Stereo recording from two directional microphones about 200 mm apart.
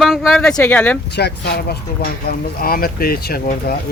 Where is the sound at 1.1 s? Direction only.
55° left (ahead or behind).